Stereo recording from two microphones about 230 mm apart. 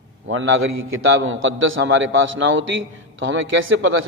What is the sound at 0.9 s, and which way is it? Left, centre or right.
A man's voice, right.